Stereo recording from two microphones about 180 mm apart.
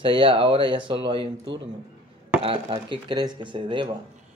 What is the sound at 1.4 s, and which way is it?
Speech, 90° right.